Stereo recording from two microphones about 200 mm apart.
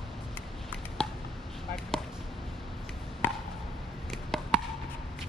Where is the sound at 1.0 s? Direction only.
5° left (ahead or behind).